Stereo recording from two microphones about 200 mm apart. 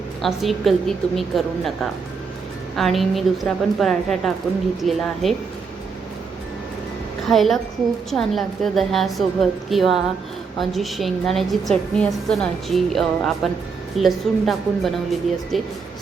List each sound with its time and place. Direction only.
0.2 s a woman's voice: centre (ahead or behind)
2.7 s a woman's voice: centre (ahead or behind)
7.3 s a woman's voice: centre (ahead or behind)